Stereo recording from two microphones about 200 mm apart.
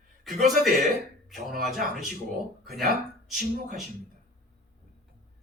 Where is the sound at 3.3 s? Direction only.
50° right (ahead or behind).